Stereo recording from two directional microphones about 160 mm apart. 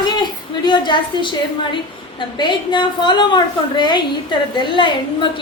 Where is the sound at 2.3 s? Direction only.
30° left (ahead or behind).